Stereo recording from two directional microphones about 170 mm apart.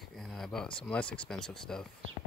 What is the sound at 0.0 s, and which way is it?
Speech, centre (ahead or behind).